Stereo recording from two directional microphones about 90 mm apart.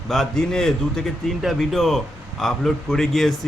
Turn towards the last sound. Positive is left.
turn(degrees=5)  # may be behind; listen again after turning